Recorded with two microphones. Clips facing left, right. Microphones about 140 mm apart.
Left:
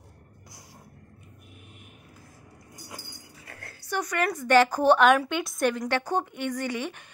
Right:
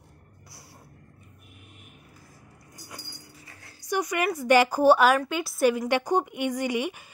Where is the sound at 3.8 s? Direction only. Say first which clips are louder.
Right 1 dB; 10° right (ahead or behind).